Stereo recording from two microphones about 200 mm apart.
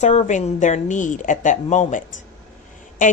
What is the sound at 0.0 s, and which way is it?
A woman's voice, 35° left (ahead or behind).